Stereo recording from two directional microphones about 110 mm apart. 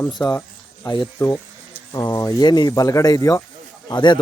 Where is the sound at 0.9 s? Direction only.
30° left (ahead or behind).